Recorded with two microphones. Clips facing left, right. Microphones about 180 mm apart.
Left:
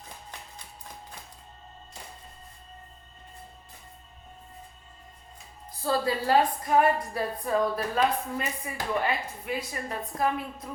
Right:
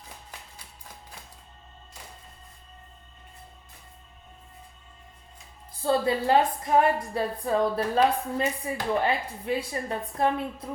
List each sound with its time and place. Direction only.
5.8 s a woman's voice: 25° right (ahead or behind)